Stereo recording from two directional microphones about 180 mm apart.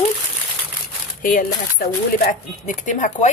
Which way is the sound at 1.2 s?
50° left (ahead or behind).